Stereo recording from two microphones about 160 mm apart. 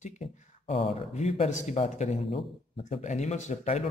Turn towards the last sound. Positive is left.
turn(degrees=45)  # may be behind; listen again after turning